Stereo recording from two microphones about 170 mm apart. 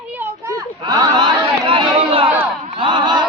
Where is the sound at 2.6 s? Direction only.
30° right (ahead or behind).